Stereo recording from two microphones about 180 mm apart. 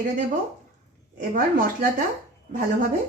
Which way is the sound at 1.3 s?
50° right (ahead or behind).